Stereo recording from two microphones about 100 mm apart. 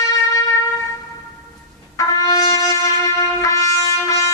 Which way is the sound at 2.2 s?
35° left (ahead or behind).